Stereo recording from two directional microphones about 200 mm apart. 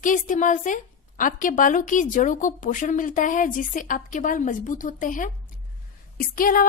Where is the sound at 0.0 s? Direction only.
40° left (ahead or behind).